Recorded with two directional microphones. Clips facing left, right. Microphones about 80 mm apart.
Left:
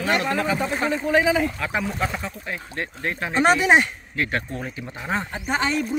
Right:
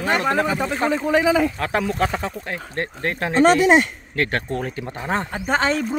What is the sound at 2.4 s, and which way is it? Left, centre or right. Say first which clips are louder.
Speech: right 3 dB; right.